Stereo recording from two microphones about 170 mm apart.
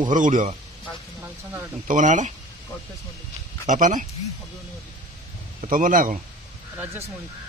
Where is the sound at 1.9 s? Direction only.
45° right (ahead or behind).